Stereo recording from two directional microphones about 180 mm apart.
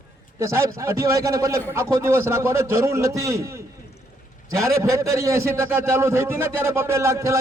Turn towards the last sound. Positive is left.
turn(degrees=-15)  # may be behind; listen again after turning